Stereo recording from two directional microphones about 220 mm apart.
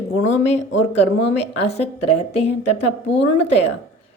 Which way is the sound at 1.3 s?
30° left (ahead or behind).